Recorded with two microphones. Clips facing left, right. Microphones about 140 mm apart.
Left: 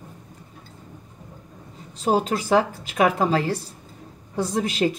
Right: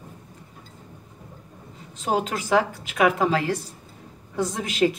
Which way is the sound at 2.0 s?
35° left (ahead or behind).